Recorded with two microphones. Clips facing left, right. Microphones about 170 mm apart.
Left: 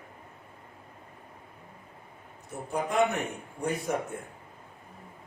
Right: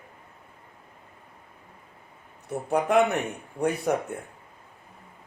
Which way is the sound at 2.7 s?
65° right (ahead or behind).